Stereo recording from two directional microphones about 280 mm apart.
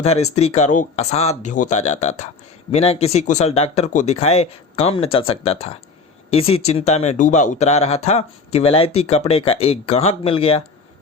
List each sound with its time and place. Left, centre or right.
0.0 s speech: left